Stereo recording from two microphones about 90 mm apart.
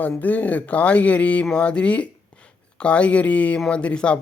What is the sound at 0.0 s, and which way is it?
Speech, 20° left (ahead or behind).